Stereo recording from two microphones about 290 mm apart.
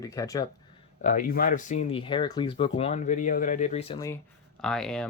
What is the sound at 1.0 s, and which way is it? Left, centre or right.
Speech, left.